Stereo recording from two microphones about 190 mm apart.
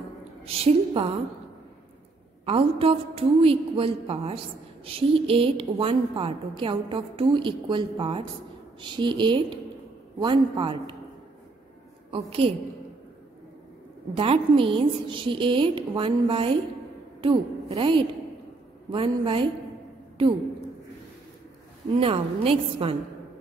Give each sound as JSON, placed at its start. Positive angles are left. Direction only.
{"t": 0.5, "sound": "a woman's voice", "side_deg": -30}
{"t": 2.4, "sound": "a woman's voice", "side_deg": -30}
{"t": 12.1, "sound": "a woman's voice", "side_deg": -30}
{"t": 14.1, "sound": "a woman's voice", "side_deg": -30}
{"t": 21.9, "sound": "a woman's voice", "side_deg": -30}